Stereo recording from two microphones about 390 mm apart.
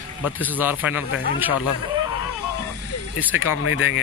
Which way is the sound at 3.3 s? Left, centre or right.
Left.